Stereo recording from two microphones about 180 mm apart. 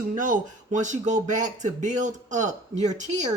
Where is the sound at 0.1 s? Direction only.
45° right (ahead or behind).